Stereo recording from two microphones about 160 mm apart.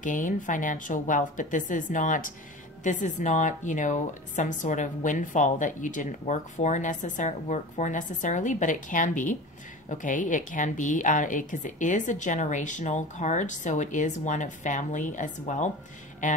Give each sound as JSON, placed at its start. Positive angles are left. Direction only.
{"t": 0.0, "sound": "a woman's voice", "side_deg": 55}